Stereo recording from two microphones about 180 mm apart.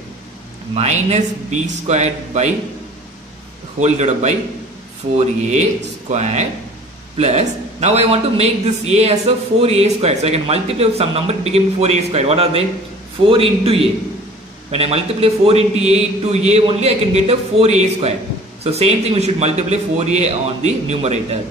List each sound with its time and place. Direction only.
0.7 s a man's voice: 40° right (ahead or behind)
3.8 s a man's voice: 40° right (ahead or behind)
5.5 s a man's voice: 40° right (ahead or behind)